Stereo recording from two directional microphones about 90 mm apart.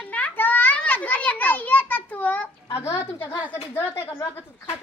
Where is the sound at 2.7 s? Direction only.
30° left (ahead or behind).